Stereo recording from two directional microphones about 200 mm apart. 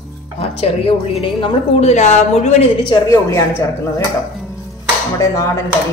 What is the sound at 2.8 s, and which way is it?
Speech, 15° left (ahead or behind).